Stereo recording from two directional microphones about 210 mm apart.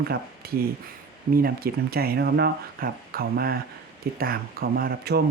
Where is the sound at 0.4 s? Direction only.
45° right (ahead or behind).